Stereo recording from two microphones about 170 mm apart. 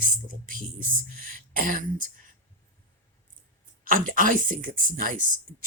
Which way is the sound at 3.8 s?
55° right (ahead or behind).